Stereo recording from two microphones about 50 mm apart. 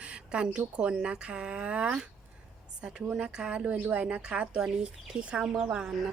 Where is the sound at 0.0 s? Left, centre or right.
Right.